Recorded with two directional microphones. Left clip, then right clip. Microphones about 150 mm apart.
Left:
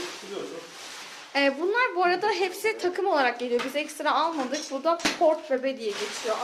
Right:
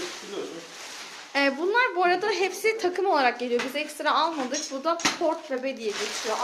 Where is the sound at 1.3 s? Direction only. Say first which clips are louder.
Right 1 dB; 5° right (ahead or behind).